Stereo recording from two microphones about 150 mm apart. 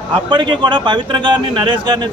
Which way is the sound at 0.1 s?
30° right (ahead or behind).